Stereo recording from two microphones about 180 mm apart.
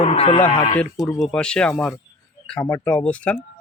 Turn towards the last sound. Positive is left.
turn(degrees=5)  # may be behind; listen again after turning